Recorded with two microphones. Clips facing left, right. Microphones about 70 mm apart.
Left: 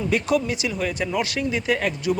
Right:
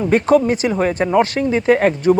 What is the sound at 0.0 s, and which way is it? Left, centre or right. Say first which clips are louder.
Speech: right 8 dB; right.